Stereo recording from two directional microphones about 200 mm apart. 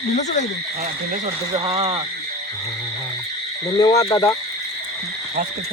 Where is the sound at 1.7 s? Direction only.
30° right (ahead or behind).